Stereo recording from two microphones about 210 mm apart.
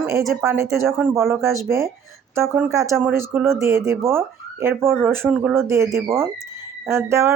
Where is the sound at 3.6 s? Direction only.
15° right (ahead or behind).